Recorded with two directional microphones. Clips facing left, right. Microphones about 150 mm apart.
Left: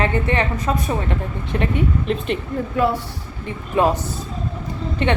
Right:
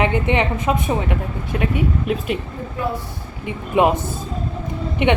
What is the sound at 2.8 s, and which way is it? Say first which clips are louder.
Speech: left 6 dB; 85° left.